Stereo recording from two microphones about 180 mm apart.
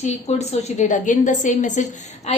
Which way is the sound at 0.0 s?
35° left (ahead or behind).